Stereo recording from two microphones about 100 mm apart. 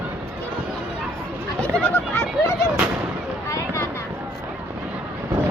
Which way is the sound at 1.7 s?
20° left (ahead or behind).